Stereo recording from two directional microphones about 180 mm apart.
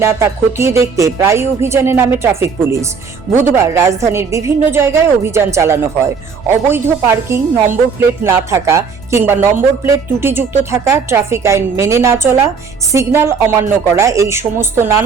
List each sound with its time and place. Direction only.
0.0 s speech: 15° right (ahead or behind)